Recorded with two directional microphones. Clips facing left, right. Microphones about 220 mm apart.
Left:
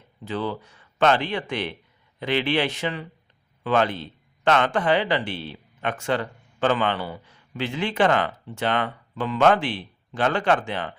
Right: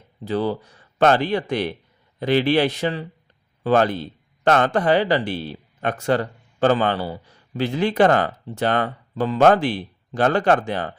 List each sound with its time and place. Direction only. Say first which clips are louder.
0.3 s a man's voice: right 5 dB; 40° right (ahead or behind)